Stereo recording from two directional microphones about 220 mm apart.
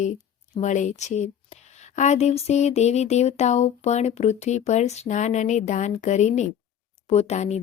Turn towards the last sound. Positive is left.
turn(degrees=30)  # may be behind; listen again after turning